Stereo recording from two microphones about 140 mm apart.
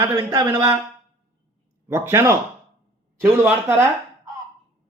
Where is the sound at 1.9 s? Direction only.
20° right (ahead or behind).